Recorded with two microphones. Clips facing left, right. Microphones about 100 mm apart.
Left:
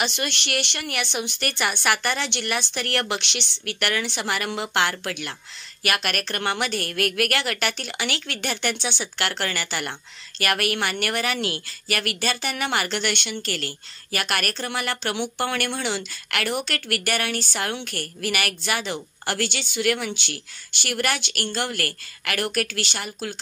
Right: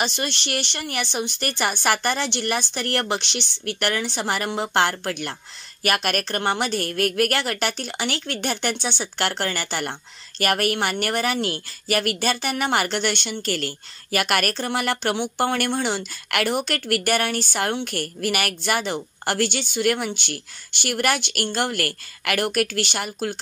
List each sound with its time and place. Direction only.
0.0 s a woman's voice: 35° right (ahead or behind); by 23.3 s 50° right (ahead or behind)